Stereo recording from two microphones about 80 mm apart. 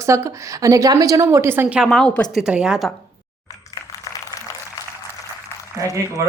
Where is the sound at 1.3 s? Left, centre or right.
Right.